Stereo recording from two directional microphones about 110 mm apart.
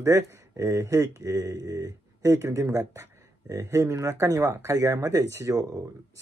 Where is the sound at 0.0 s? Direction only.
25° right (ahead or behind).